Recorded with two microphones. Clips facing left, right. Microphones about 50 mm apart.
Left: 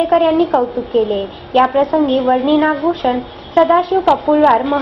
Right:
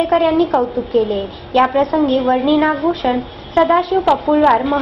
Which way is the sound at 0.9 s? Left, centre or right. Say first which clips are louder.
Left 1 dB; left.